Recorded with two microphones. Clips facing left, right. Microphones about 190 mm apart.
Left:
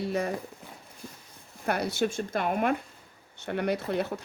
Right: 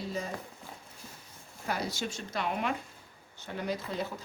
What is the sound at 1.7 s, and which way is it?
Speech, 60° left (ahead or behind).